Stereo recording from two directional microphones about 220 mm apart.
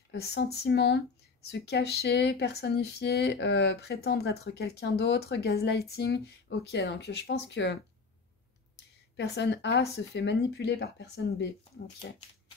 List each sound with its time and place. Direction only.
0.1 s speech: 50° left (ahead or behind)